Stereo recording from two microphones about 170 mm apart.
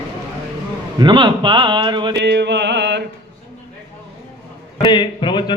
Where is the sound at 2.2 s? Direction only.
90° right.